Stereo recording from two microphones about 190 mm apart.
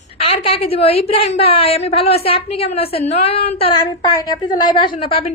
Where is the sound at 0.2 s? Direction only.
30° left (ahead or behind).